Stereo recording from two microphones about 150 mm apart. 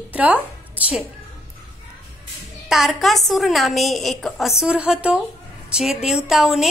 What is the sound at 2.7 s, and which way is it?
A woman's voice, centre (ahead or behind).